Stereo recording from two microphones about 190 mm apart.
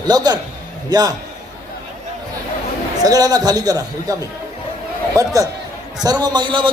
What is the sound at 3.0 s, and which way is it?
A man's voice, 20° right (ahead or behind).